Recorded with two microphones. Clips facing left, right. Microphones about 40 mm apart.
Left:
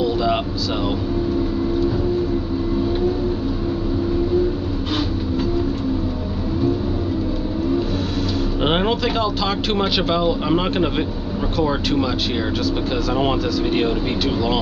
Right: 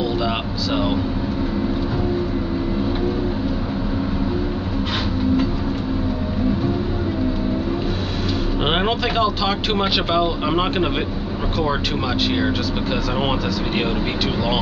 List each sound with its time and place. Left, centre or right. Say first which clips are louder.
0.0 s vehicle: left 3 dB; centre
8.6 s speech: left 1 dB; centre